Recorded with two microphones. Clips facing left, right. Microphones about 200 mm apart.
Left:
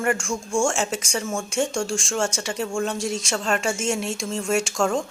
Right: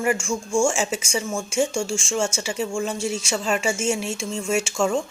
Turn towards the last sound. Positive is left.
turn(degrees=0)  # may be behind; listen again after turning